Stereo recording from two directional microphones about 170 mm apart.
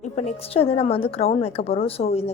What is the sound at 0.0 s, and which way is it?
A woman's voice, 40° left (ahead or behind).